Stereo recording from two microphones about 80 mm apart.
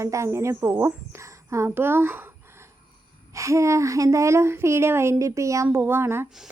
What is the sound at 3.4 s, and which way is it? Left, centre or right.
A woman's voice, right.